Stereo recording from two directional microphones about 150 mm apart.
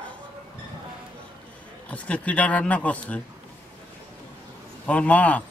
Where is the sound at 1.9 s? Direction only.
10° left (ahead or behind).